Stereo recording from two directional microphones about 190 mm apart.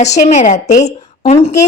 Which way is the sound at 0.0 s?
35° left (ahead or behind).